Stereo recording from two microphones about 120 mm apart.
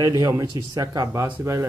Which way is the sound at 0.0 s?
25° right (ahead or behind).